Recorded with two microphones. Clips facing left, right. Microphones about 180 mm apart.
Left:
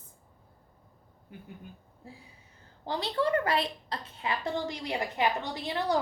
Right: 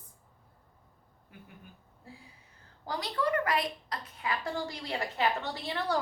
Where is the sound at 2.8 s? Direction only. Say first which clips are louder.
Left 3 dB; 25° left (ahead or behind).